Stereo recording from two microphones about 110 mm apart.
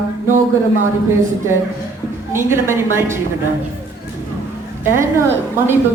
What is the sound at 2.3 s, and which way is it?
Speech, 20° right (ahead or behind).